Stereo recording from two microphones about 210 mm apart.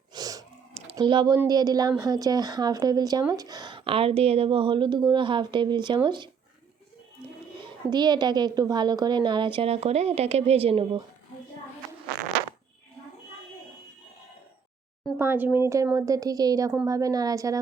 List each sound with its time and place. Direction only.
0.1 s a sound: 15° right (ahead or behind)
0.9 s a woman's voice: 20° right (ahead or behind)
7.6 s a woman's voice: 20° right (ahead or behind)
15.2 s a woman's voice: 10° right (ahead or behind)